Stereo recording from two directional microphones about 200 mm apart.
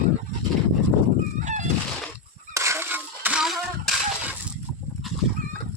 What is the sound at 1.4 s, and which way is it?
Fowl, 40° right (ahead or behind).